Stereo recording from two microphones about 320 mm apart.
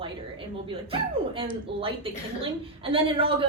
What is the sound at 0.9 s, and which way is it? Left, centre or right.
Speech, centre.